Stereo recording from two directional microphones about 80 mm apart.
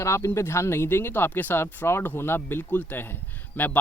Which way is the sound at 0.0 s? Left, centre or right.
Left.